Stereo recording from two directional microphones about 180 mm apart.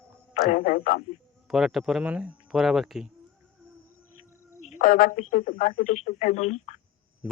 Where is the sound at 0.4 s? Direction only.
50° left (ahead or behind).